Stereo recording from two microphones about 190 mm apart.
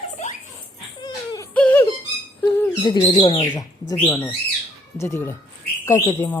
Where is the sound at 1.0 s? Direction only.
20° left (ahead or behind).